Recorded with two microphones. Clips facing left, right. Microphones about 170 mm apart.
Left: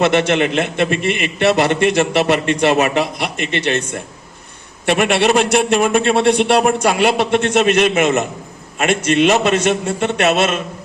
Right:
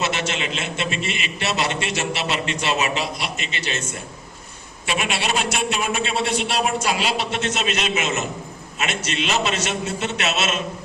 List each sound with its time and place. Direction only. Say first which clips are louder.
0.0 s a man's voice: left 11 dB; 60° left (ahead or behind)